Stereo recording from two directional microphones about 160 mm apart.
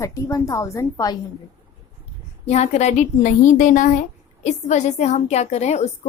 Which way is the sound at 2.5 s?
45° left (ahead or behind).